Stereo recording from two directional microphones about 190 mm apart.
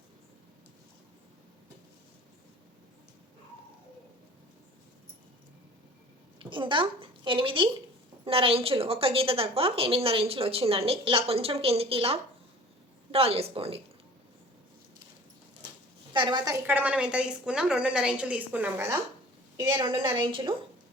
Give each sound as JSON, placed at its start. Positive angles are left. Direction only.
{"t": 6.4, "sound": "a woman's voice", "side_deg": -25}
{"t": 16.1, "sound": "a woman's voice", "side_deg": -25}
{"t": 16.6, "sound": "a woman's voice", "side_deg": -10}
{"t": 19.5, "sound": "a woman's voice", "side_deg": -25}